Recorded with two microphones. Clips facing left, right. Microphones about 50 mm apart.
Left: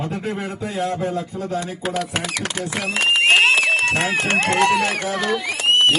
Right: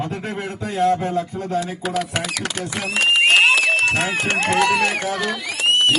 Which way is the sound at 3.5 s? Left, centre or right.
Left.